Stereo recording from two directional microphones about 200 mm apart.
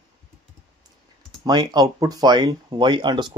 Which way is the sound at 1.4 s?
20° right (ahead or behind).